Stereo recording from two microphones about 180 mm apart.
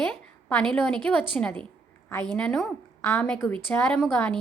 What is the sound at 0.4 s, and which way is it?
A woman's voice, 5° left (ahead or behind).